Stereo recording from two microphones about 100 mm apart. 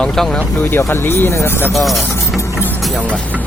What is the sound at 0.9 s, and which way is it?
Speech, 25° left (ahead or behind).